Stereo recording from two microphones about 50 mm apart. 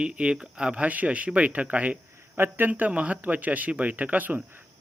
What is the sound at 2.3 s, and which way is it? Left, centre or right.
Speech, right.